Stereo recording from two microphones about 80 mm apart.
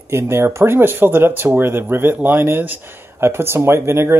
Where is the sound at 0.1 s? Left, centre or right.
Right.